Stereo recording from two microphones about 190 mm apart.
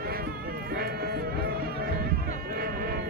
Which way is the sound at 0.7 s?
55° right (ahead or behind).